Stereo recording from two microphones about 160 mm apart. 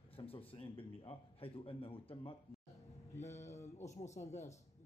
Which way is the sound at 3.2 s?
45° left (ahead or behind).